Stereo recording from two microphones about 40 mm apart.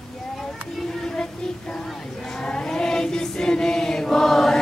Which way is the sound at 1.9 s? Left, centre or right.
Centre.